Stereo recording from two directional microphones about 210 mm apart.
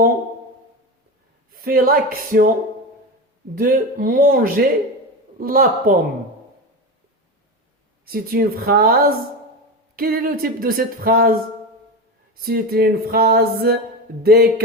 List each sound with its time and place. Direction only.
1.5 s speech: 45° right (ahead or behind)
3.5 s speech: 40° right (ahead or behind)
8.0 s speech: 45° right (ahead or behind)
12.4 s speech: 45° right (ahead or behind)